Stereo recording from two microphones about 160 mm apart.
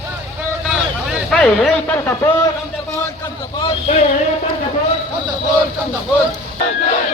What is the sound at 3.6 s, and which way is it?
Vehicle, 40° left (ahead or behind).